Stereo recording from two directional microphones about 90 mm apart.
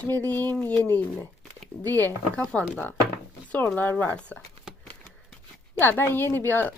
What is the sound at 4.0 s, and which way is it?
Speech, 15° left (ahead or behind).